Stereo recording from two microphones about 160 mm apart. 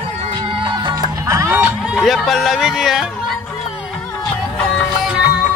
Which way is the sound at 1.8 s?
Centre (ahead or behind).